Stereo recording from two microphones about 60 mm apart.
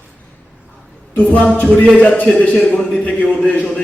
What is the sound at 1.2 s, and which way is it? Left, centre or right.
A man's voice, left.